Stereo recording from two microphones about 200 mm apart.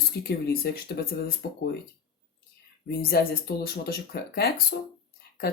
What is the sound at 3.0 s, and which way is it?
Speech, 50° left (ahead or behind).